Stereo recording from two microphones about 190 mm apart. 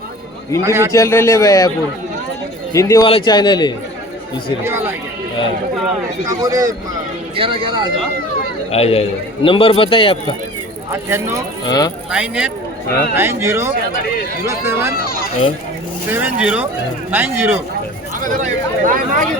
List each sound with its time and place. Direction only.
0.6 s speech: 15° right (ahead or behind)
0.9 s speech: 15° left (ahead or behind)
2.7 s a man's voice: 15° left (ahead or behind)
4.6 s speech: 10° right (ahead or behind)
6.2 s speech: 20° right (ahead or behind)
8.7 s a man's voice: 30° left (ahead or behind)
10.9 s speech: 15° right (ahead or behind)
11.6 s a man's voice: 20° left (ahead or behind)
12.1 s speech: 5° right (ahead or behind)
14.9 s speech: 50° left (ahead or behind)
16.0 s speech: 10° right (ahead or behind)
18.2 s speech: 45° right (ahead or behind)